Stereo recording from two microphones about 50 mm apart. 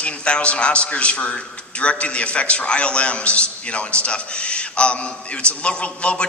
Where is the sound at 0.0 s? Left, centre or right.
Left.